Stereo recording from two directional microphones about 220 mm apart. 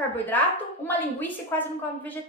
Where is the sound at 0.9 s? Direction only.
10° left (ahead or behind).